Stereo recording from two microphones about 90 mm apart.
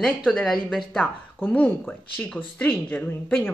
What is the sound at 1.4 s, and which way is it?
Speech, 15° left (ahead or behind).